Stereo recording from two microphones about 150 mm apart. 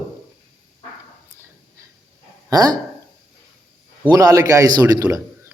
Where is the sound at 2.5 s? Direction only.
25° right (ahead or behind).